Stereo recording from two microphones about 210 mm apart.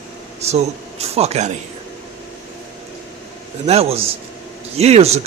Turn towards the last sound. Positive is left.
turn(degrees=-30)  # may be behind; listen again after turning